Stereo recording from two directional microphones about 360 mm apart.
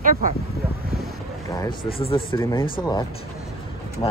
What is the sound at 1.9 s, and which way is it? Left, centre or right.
Speech, centre.